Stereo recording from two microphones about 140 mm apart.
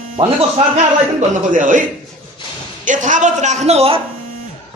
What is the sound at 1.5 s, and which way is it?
Speech, 65° right (ahead or behind).